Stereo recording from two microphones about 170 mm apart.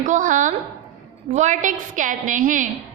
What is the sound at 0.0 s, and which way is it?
A woman's voice, 50° right (ahead or behind).